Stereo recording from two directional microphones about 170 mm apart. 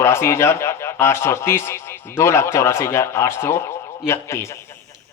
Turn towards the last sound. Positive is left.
turn(degrees=15)  # may be behind; listen again after turning